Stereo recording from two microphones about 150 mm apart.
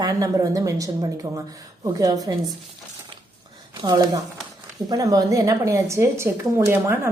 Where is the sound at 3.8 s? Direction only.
25° right (ahead or behind).